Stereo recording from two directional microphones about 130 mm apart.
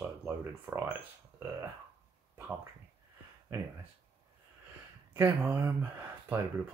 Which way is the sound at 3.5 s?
20° right (ahead or behind).